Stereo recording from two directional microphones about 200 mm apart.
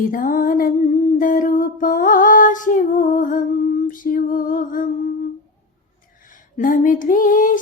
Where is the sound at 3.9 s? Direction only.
45° left (ahead or behind).